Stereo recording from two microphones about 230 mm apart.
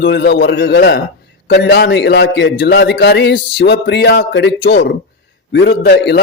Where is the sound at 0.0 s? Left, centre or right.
Left.